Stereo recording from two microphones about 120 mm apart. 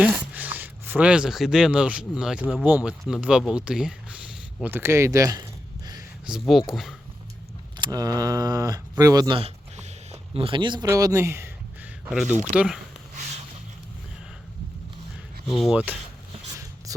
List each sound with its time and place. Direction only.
0.0 s speech: 10° right (ahead or behind)
3.5 s a sound: 5° right (ahead or behind); by 6.0 s 30° right (ahead or behind)
6.5 s speech: centre (ahead or behind)
7.8 s speech: 30° right (ahead or behind)
9.4 s a sound: 65° right (ahead or behind)
10.3 s speech: 45° right (ahead or behind)
10.8 s speech: 25° right (ahead or behind)
12.5 s speech: 5° right (ahead or behind)
15.4 s speech: centre (ahead or behind)
15.7 s speech: 10° right (ahead or behind)